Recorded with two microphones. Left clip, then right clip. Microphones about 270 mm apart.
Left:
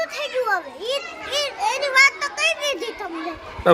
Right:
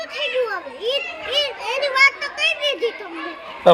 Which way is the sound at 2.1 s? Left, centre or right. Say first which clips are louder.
Right 1 dB; left.